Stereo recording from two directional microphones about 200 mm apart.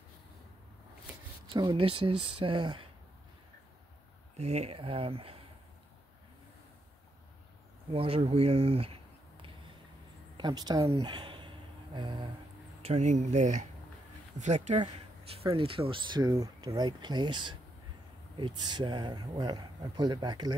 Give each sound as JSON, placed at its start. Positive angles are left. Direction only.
{"t": 1.5, "sound": "speech", "side_deg": -25}
{"t": 4.4, "sound": "speech", "side_deg": -30}
{"t": 7.9, "sound": "speech", "side_deg": -30}
{"t": 10.3, "sound": "speech", "side_deg": -20}
{"t": 12.8, "sound": "speech", "side_deg": -35}